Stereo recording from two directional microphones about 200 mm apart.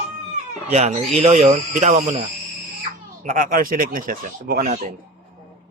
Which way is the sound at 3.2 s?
45° right (ahead or behind).